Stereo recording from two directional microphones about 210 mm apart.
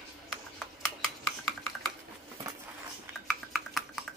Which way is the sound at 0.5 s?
Centre (ahead or behind).